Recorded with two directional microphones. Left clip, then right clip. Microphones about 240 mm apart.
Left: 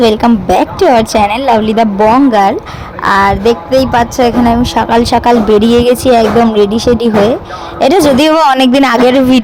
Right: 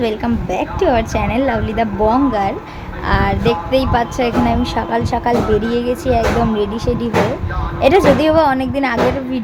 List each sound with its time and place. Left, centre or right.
0.0 s a woman's voice: left